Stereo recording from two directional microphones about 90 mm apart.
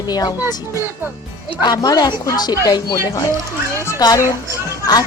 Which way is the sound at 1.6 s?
50° left (ahead or behind).